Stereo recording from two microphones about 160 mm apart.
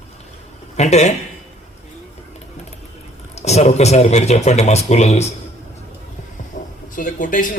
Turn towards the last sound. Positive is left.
turn(degrees=55)  # may be behind; listen again after turning